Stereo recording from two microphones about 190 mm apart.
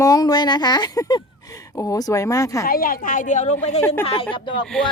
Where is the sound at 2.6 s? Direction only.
50° left (ahead or behind).